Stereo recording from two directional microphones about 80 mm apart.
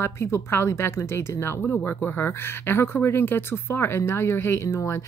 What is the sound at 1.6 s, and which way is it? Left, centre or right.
Speech, centre.